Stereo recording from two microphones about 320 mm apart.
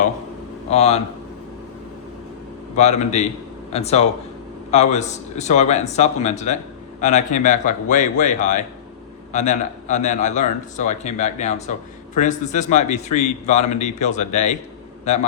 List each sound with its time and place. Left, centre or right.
0.7 s a man's voice: centre
2.7 s a man's voice: left